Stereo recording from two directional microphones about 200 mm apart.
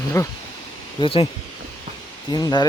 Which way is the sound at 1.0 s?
25° left (ahead or behind).